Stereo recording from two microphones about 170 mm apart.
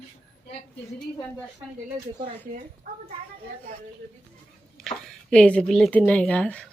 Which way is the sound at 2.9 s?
50° right (ahead or behind).